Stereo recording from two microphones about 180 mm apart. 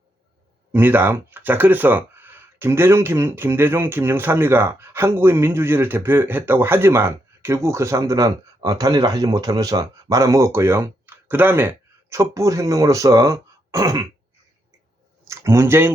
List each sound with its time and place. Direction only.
0.7 s speech: 10° right (ahead or behind)
15.2 s speech: 15° right (ahead or behind)